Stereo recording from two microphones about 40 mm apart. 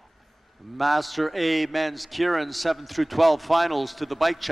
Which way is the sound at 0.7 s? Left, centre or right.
Centre.